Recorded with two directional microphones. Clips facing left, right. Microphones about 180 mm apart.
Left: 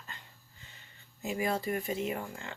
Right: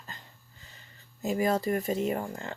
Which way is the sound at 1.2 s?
40° right (ahead or behind).